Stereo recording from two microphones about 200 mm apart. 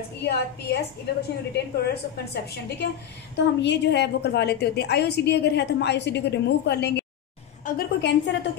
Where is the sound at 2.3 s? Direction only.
55° left (ahead or behind).